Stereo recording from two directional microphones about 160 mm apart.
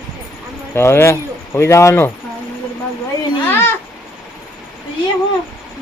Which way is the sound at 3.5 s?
15° left (ahead or behind).